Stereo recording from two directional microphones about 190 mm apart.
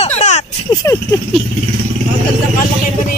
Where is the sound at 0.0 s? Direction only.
35° left (ahead or behind).